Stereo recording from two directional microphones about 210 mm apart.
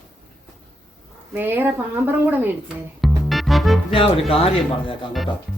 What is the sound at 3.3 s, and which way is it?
Music, centre (ahead or behind).